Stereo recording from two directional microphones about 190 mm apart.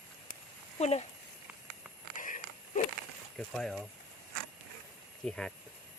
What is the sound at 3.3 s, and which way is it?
Speech, centre (ahead or behind).